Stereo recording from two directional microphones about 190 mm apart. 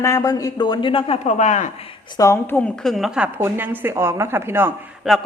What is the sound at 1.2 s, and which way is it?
Speech, 40° left (ahead or behind).